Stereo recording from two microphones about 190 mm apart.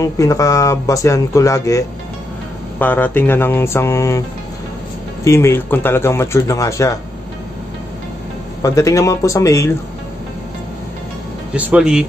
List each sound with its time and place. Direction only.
0.0 s speech: 15° left (ahead or behind)
5.2 s speech: 15° left (ahead or behind)
8.6 s speech: 15° left (ahead or behind)
11.5 s speech: 5° right (ahead or behind)